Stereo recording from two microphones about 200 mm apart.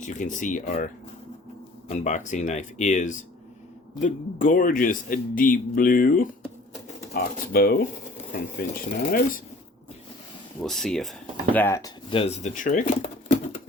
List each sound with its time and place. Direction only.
0.0 s speech: 40° left (ahead or behind)
1.9 s a man's voice: 35° left (ahead or behind)
10.6 s speech: centre (ahead or behind)
11.5 s speech: 10° left (ahead or behind)
12.1 s speech: 30° left (ahead or behind)